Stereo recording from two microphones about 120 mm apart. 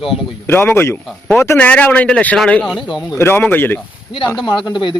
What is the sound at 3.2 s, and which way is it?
Speech, 20° left (ahead or behind).